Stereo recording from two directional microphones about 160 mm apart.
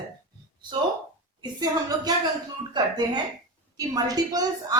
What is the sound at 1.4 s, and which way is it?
A woman's voice, 25° right (ahead or behind).